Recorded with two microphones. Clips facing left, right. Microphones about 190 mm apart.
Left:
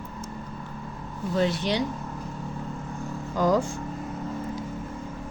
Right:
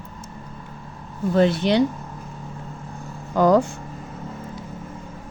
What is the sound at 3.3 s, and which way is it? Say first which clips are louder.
Speech: right 6 dB; 65° right (ahead or behind).